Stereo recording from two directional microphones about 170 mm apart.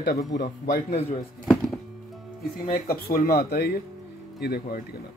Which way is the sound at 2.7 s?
55° left (ahead or behind).